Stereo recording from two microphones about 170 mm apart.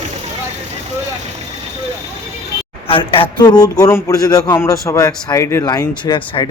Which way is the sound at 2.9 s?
30° left (ahead or behind).